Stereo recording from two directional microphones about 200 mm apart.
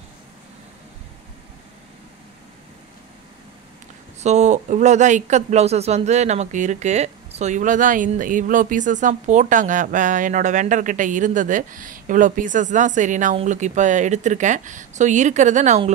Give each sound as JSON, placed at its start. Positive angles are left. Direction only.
{"t": 4.2, "sound": "speech", "side_deg": -35}